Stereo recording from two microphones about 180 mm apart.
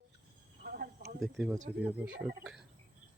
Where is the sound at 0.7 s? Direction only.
60° right (ahead or behind).